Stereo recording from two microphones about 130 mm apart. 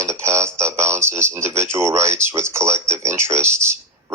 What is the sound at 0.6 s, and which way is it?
Speech, 20° right (ahead or behind).